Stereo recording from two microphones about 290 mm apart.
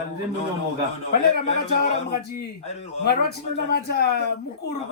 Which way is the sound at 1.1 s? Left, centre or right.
Left.